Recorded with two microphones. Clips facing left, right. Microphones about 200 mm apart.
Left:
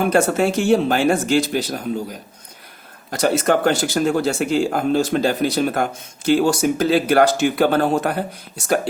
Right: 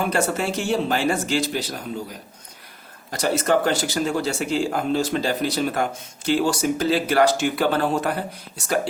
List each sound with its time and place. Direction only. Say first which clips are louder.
0.0 s speech: left 6 dB; 50° left (ahead or behind)
3.1 s speech: left 3 dB; 55° left (ahead or behind)